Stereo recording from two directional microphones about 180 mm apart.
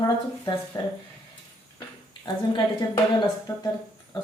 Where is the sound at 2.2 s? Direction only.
25° left (ahead or behind).